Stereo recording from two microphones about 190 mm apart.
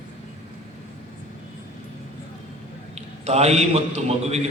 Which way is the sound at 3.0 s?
35° right (ahead or behind).